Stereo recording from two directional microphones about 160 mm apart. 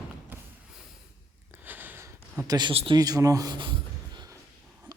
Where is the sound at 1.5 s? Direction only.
10° right (ahead or behind).